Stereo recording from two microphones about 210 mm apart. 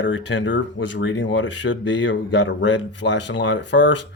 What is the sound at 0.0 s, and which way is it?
Speech, 60° left (ahead or behind).